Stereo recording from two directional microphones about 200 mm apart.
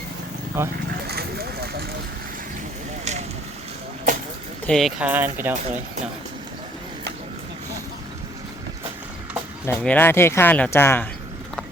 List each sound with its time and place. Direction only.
0.6 s speech: 10° right (ahead or behind)
1.0 s a sound: 50° right (ahead or behind)
3.0 s vehicle: 35° right (ahead or behind)
4.6 s speech: centre (ahead or behind)
9.6 s speech: 10° left (ahead or behind)